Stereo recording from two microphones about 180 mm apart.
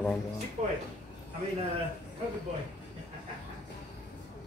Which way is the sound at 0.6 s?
40° right (ahead or behind).